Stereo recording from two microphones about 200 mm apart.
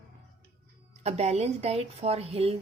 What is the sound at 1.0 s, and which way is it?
Speech, 35° right (ahead or behind).